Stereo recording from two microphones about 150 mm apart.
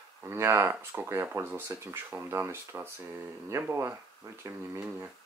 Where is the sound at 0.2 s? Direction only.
15° right (ahead or behind).